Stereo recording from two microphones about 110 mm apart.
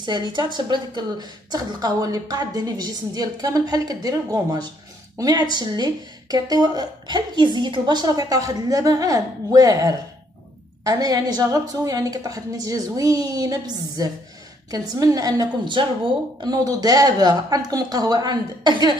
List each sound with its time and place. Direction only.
0.0 s speech: 40° right (ahead or behind)